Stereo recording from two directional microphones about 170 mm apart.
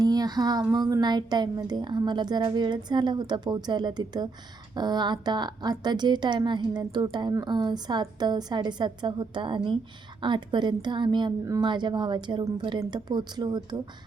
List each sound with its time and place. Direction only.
0.0 s a woman's voice: 25° right (ahead or behind)